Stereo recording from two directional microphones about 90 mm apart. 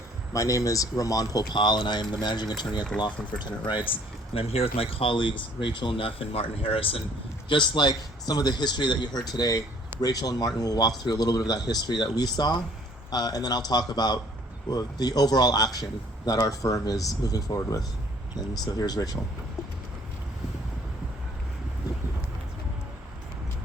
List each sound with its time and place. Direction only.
0.3 s a man's voice: 40° left (ahead or behind)
3.7 s speech: 65° left (ahead or behind)
4.4 s speech: 90° left
7.4 s a man's voice: 60° left (ahead or behind); by 19.2 s 45° left (ahead or behind)